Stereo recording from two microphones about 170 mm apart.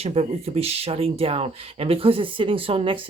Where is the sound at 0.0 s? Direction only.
35° right (ahead or behind).